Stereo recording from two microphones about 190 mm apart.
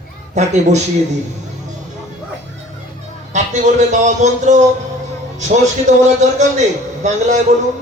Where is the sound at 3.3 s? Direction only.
40° right (ahead or behind).